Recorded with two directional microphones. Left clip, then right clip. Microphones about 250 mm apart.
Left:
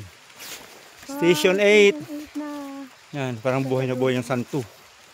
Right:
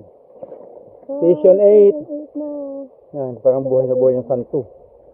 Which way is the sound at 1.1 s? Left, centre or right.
Left.